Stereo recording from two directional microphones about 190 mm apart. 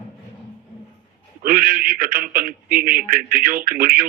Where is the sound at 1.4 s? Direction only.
45° right (ahead or behind).